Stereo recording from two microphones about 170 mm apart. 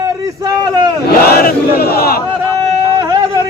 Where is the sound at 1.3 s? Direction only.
65° left (ahead or behind).